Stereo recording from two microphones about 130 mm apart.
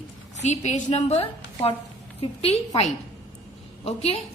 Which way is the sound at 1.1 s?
50° left (ahead or behind).